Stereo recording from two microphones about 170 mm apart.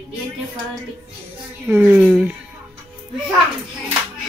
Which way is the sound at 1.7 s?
10° right (ahead or behind).